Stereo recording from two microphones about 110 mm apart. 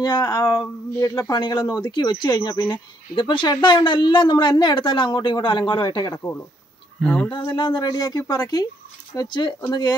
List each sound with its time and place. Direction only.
0.0 s speech: 35° left (ahead or behind)
7.0 s speech: 10° left (ahead or behind)
7.5 s speech: 40° left (ahead or behind)